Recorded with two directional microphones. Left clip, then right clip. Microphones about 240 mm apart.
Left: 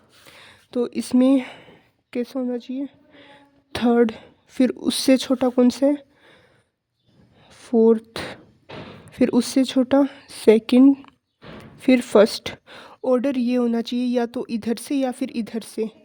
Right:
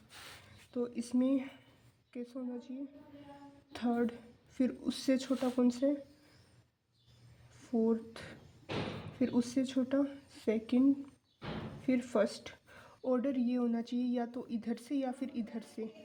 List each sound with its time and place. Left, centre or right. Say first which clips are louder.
0.7 s speech: left 14 dB; left
7.5 s a sound: left 17 dB; left
9.1 s speech: left 15 dB; left